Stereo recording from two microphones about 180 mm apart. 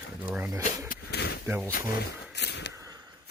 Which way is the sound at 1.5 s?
15° right (ahead or behind).